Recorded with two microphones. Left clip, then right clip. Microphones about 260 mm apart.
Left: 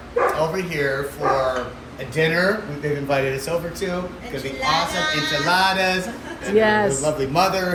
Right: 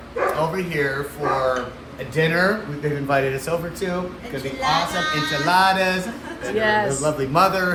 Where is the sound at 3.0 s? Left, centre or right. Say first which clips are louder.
Right 2 dB; centre.